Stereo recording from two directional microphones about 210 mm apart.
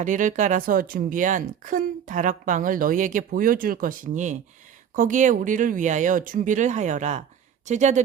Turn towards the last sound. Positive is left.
turn(degrees=-35)  # may be behind; listen again after turning